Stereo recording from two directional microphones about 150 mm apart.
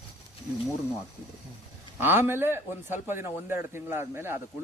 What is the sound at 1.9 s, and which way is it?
Speech, 15° right (ahead or behind).